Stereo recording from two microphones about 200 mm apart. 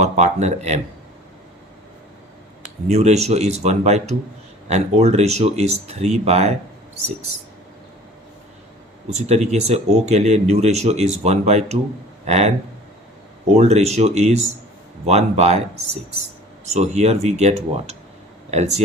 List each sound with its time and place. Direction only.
0.0 s speech: 35° right (ahead or behind)
2.8 s speech: 35° right (ahead or behind)
9.0 s speech: 35° right (ahead or behind)
16.7 s speech: 35° right (ahead or behind)